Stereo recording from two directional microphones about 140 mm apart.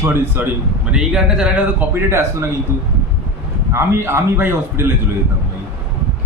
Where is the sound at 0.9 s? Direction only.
5° right (ahead or behind).